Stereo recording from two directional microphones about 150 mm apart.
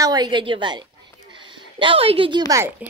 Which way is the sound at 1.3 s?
30° right (ahead or behind).